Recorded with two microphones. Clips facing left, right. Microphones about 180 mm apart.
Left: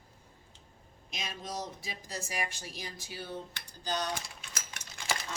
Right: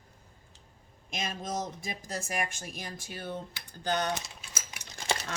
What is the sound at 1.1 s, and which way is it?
Speech, 50° right (ahead or behind).